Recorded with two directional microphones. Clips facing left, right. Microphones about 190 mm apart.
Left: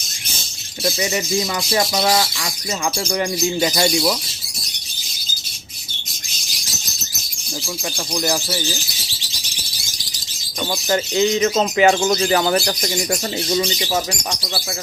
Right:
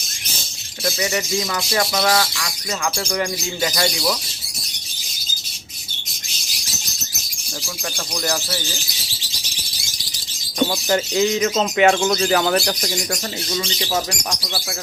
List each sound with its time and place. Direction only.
0.9 s speech: 20° left (ahead or behind)
8.1 s speech: 10° left (ahead or behind)
10.7 s speech: centre (ahead or behind)